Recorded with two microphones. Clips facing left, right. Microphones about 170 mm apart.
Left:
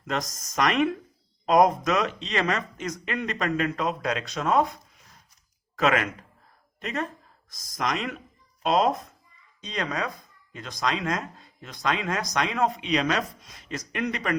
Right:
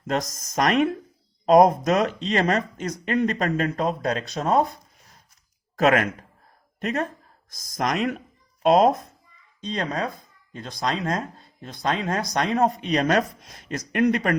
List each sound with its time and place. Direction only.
0.1 s speech: 40° right (ahead or behind)
5.7 s speech: 45° right (ahead or behind)
9.6 s speech: 30° right (ahead or behind); by 14.3 s 50° right (ahead or behind)